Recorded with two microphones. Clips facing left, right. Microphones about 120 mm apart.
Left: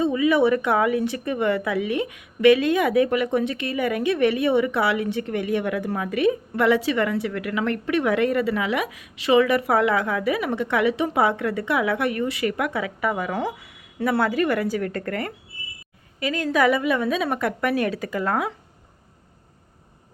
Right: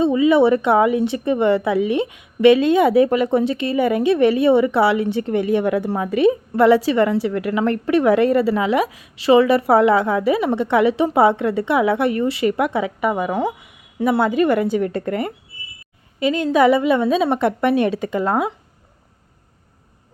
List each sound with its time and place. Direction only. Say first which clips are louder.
0.0 s speech: right 5 dB; 25° right (ahead or behind)